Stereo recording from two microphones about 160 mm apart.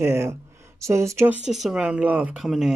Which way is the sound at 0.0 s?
15° right (ahead or behind).